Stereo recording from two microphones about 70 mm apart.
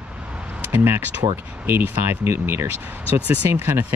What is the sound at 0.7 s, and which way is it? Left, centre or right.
Speech, right.